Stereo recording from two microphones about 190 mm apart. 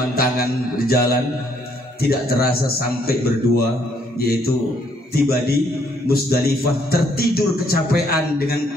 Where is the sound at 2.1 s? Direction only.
55° left (ahead or behind).